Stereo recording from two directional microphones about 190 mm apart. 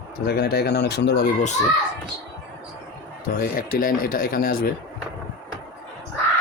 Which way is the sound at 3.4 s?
50° left (ahead or behind).